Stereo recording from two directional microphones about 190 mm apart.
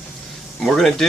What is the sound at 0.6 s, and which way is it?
Speech, centre (ahead or behind).